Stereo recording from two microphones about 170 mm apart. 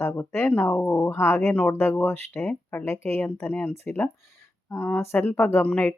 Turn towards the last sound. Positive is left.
turn(degrees=10)  # may be behind; listen again after turning